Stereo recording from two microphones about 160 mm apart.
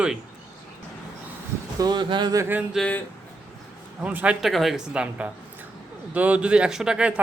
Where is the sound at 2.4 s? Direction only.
10° right (ahead or behind).